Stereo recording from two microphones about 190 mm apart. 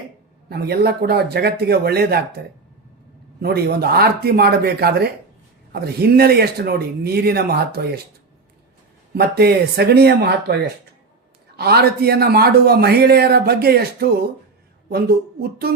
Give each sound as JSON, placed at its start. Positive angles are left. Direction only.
{"t": 0.4, "sound": "a man's voice", "side_deg": -55}
{"t": 3.4, "sound": "a man's voice", "side_deg": -55}
{"t": 9.1, "sound": "a man's voice", "side_deg": -55}
{"t": 11.5, "sound": "a man's voice", "side_deg": -60}